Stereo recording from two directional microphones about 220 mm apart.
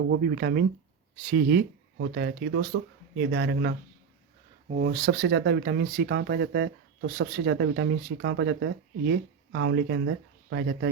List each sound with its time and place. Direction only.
0.1 s speech: 45° right (ahead or behind)
4.7 s speech: 35° right (ahead or behind); by 10.8 s 55° right (ahead or behind)